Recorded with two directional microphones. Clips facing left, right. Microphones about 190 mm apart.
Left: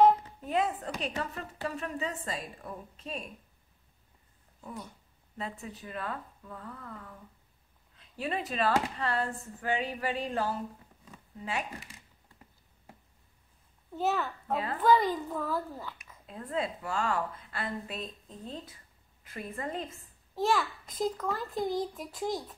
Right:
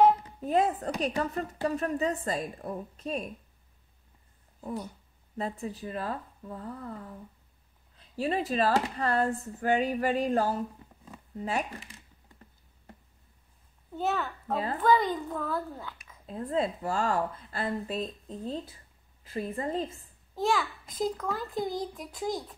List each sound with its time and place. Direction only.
0.4 s a woman's voice: 40° right (ahead or behind)
4.6 s a woman's voice: 35° right (ahead or behind)
8.2 s a woman's voice: 35° right (ahead or behind)
13.9 s a child's voice: centre (ahead or behind)
16.3 s a woman's voice: 35° right (ahead or behind)
20.3 s a child's voice: centre (ahead or behind)